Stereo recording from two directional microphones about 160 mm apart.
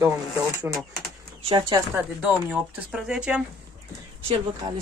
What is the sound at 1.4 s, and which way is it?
Speech, 30° right (ahead or behind).